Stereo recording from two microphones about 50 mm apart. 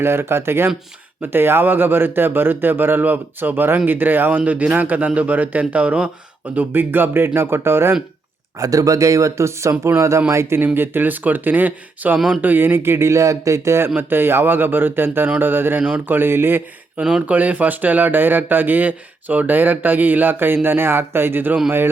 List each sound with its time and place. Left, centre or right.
0.0 s speech: right
6.6 s speech: right
8.5 s speech: right
9.9 s speech: right
10.8 s speech: right
13.8 s speech: right
17.0 s speech: right